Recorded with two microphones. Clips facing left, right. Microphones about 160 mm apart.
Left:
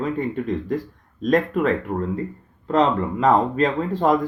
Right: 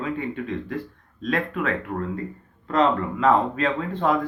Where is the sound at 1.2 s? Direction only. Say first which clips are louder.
Left 6 dB; 40° left (ahead or behind).